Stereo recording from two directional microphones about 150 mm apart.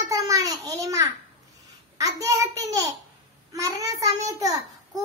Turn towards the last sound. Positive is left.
turn(degrees=-25)  # may be behind; listen again after turning